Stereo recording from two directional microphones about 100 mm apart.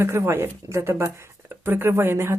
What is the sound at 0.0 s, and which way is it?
Speech, 25° right (ahead or behind).